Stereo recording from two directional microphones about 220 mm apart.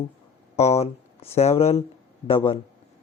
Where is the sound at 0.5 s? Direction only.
30° left (ahead or behind).